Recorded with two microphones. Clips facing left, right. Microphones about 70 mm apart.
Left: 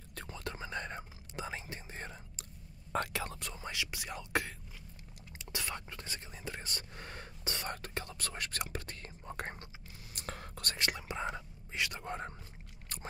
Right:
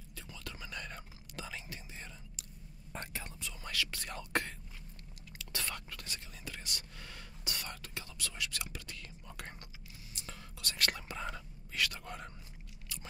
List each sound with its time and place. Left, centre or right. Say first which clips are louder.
0.3 s whispering: left 6 dB; left
2.9 s whispering: left 9 dB; left
3.5 s whispering: right 4 dB; left; by 4.6 s centre
5.4 s whispering: left 1 dB; centre
10.1 s whispering: left 7 dB; left
10.9 s whispering: left 2 dB; centre
12.9 s a sound: left 1 dB; left